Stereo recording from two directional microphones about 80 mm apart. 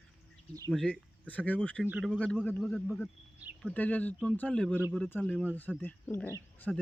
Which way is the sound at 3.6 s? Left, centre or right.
Centre.